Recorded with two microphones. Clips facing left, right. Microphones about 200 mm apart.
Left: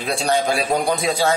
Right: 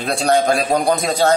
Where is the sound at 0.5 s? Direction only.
40° right (ahead or behind).